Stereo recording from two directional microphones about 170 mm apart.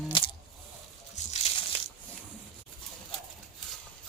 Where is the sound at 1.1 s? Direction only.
40° left (ahead or behind).